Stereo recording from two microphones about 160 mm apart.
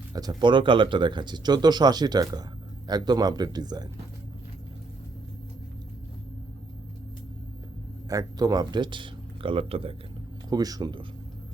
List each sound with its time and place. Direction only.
0.1 s speech: 25° right (ahead or behind)
8.1 s speech: 20° right (ahead or behind)
10.5 s speech: 25° right (ahead or behind)